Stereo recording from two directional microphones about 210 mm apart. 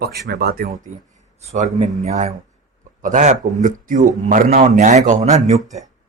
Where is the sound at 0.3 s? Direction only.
50° right (ahead or behind).